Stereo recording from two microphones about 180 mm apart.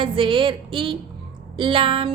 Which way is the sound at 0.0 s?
30° right (ahead or behind).